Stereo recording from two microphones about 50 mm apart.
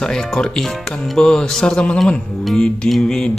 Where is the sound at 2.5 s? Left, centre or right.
Centre.